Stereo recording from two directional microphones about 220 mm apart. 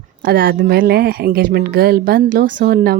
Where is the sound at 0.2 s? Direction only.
40° right (ahead or behind).